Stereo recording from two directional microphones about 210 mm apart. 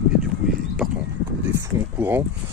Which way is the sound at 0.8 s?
Centre (ahead or behind).